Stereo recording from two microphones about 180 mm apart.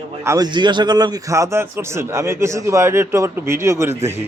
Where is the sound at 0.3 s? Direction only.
20° right (ahead or behind).